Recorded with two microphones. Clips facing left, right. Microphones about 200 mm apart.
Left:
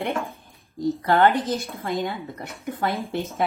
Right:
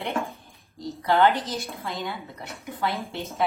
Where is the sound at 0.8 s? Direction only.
50° left (ahead or behind).